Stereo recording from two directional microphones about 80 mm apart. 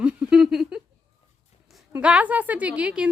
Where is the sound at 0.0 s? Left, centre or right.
Centre.